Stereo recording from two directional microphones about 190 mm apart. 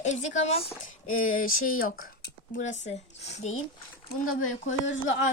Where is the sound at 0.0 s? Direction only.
40° left (ahead or behind).